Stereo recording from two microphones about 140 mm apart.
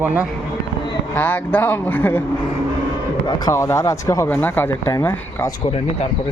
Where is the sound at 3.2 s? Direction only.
25° left (ahead or behind).